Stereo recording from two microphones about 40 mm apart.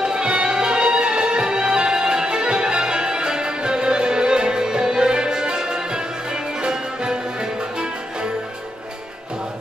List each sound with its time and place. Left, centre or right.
0.0 s music: right